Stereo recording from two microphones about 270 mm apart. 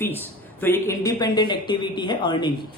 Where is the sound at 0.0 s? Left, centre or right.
Centre.